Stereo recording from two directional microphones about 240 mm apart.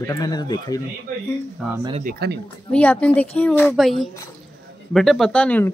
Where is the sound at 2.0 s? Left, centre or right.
Right.